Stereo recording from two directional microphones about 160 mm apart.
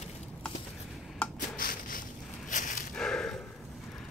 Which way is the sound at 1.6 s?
60° left (ahead or behind).